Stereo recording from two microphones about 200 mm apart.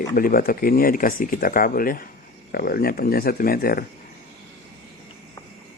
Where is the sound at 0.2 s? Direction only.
45° left (ahead or behind).